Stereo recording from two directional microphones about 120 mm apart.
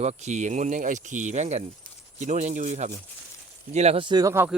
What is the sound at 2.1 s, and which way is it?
Speech, 80° right.